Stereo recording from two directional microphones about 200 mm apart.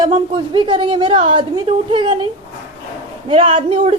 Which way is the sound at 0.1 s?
25° right (ahead or behind).